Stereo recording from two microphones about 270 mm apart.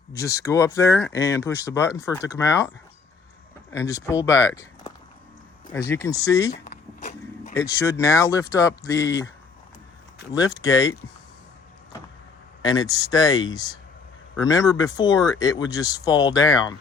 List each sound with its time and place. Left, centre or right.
0.2 s speech: centre
6.7 s biting: left
7.5 s speech: centre
10.3 s speech: centre
12.6 s speech: centre